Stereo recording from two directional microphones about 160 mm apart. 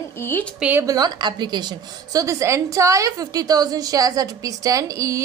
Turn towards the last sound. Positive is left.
turn(degrees=-20)  # may be behind; listen again after turning